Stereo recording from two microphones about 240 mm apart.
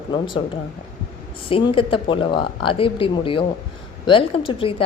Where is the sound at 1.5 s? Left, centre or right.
Left.